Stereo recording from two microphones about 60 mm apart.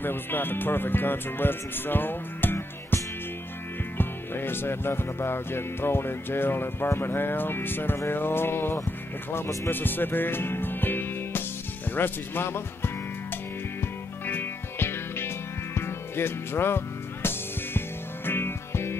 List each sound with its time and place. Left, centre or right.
0.0 s speech: left
4.0 s speech: left
11.9 s music: left